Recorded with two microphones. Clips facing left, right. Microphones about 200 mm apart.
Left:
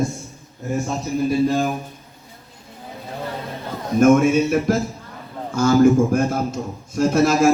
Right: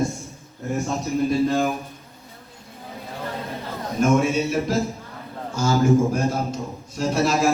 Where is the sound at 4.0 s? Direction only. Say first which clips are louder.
Left 6 dB; 50° left (ahead or behind).